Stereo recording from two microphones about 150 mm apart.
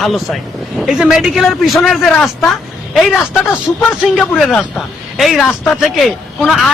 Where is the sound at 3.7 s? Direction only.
5° left (ahead or behind).